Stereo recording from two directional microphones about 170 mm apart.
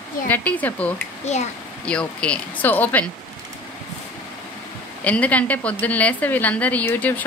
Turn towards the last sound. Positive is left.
turn(degrees=10)  # may be behind; listen again after turning